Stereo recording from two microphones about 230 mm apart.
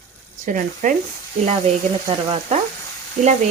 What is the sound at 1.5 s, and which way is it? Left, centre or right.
Frying, right.